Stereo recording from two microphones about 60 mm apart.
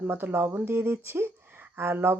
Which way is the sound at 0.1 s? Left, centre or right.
Right.